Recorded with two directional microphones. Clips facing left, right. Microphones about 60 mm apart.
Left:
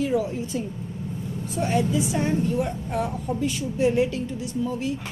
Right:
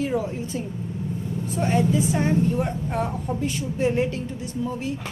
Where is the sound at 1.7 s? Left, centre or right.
Right.